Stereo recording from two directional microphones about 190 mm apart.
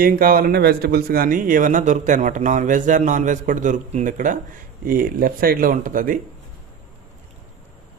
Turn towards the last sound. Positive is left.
turn(degrees=-45)  # may be behind; listen again after turning